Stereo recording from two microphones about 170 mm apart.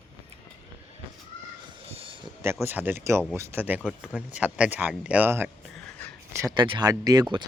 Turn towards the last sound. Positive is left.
turn(degrees=-20)  # may be behind; listen again after turning